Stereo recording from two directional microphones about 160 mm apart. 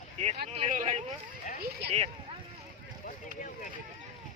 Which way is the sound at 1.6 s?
70° right (ahead or behind).